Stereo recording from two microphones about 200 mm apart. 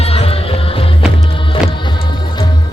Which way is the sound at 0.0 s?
30° left (ahead or behind).